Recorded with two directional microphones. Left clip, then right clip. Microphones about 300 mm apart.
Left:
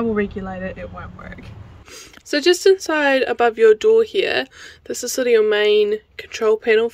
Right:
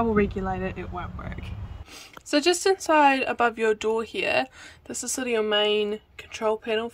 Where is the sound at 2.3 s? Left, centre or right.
Centre.